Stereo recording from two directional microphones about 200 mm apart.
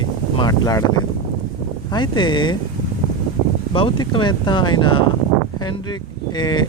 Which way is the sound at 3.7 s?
25° left (ahead or behind).